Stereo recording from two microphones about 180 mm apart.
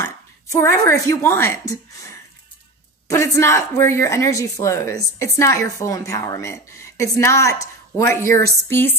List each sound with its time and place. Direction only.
0.0 s speech: 15° left (ahead or behind)